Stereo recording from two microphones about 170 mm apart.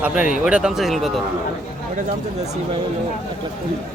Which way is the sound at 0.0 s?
10° right (ahead or behind).